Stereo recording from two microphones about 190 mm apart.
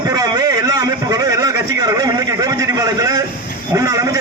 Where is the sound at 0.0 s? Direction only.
20° right (ahead or behind).